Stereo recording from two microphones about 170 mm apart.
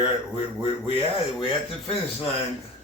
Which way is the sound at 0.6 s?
30° left (ahead or behind).